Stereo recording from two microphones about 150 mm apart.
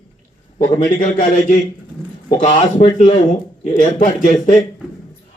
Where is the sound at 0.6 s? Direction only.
60° left (ahead or behind).